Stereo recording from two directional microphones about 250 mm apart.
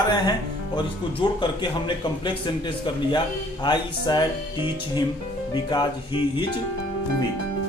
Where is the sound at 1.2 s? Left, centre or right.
Centre.